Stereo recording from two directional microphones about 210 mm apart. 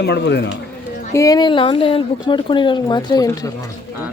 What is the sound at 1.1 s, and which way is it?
A woman's voice, 15° left (ahead or behind).